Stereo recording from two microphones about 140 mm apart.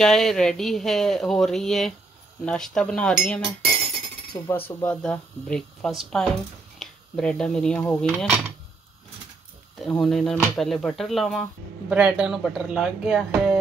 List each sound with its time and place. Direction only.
0.0 s speech: 5° left (ahead or behind)
4.3 s cutlery: 20° left (ahead or behind)
4.6 s speech: 10° left (ahead or behind)
9.8 s speech: 5° left (ahead or behind)